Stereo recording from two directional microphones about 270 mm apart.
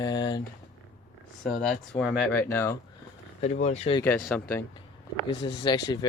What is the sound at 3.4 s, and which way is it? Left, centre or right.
Speech, left.